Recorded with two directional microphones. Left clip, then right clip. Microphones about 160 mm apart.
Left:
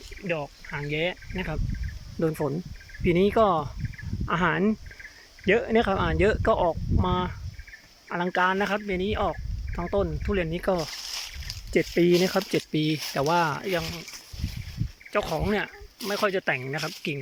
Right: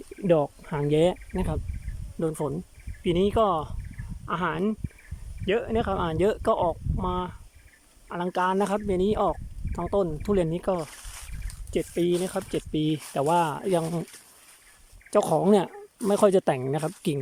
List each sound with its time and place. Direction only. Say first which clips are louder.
0.3 s speech: right 8 dB; 40° right (ahead or behind)
2.1 s speech: left 2 dB; 5° right (ahead or behind); by 10.6 s 25° right (ahead or behind)
10.6 s speech: left 1 dB; 15° right (ahead or behind)
10.8 s a sound: left 10 dB; 15° left (ahead or behind)
11.7 s speech: left 4 dB; 5° right (ahead or behind)
12.1 s speech: left 5 dB; 10° left (ahead or behind)
12.5 s speech: left 1 dB; 10° right (ahead or behind)
15.1 s speech: right 5 dB; 35° right (ahead or behind)